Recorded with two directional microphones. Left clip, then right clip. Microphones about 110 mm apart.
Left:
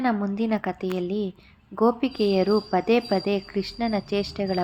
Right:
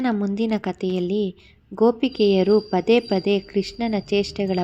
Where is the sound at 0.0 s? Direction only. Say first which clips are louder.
Right 2 dB; 30° right (ahead or behind).